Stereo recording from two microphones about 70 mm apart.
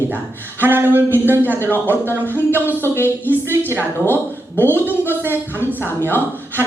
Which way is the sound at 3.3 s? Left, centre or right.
Right.